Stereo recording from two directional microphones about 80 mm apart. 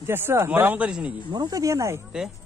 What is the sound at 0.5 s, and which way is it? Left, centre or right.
Speech, centre.